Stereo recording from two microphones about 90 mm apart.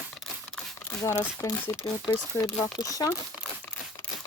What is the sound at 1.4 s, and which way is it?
Speech, 35° left (ahead or behind).